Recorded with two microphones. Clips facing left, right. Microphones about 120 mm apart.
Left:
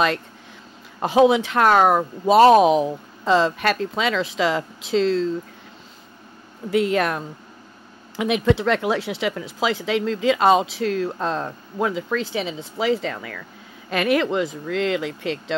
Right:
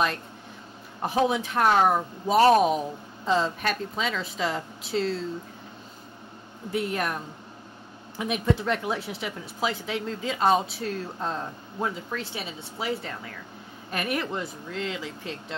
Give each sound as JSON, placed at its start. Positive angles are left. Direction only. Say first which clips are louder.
{"t": 1.0, "sound": "speech", "louder": "left 8 dB", "side_deg": 90}
{"t": 6.7, "sound": "speech", "louder": "left 8 dB", "side_deg": 90}